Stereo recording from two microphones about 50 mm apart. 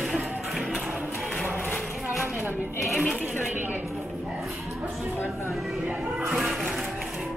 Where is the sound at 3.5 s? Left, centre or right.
Right.